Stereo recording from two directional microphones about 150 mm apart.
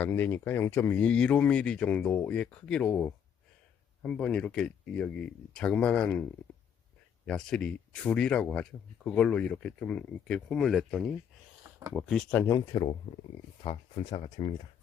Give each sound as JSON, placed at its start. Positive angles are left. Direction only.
{"t": 0.0, "sound": "speech", "side_deg": 10}
{"t": 7.3, "sound": "speech", "side_deg": 5}
{"t": 12.5, "sound": "speech", "side_deg": 25}